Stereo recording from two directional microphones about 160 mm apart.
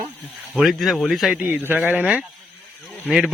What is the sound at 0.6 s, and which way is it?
Speech, centre (ahead or behind).